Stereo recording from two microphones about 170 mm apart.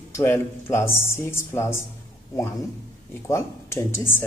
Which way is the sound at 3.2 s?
15° left (ahead or behind).